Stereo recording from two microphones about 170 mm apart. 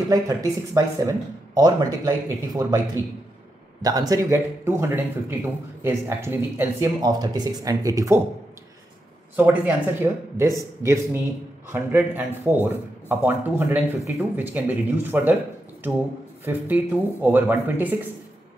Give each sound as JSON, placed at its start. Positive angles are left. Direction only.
{"t": 0.1, "sound": "speech", "side_deg": -20}
{"t": 3.8, "sound": "a man's voice", "side_deg": -20}
{"t": 9.4, "sound": "a man's voice", "side_deg": -10}
{"t": 11.7, "sound": "a man's voice", "side_deg": -10}
{"t": 16.4, "sound": "a man's voice", "side_deg": -10}